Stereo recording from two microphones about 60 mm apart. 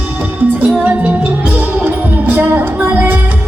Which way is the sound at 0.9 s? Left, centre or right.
Right.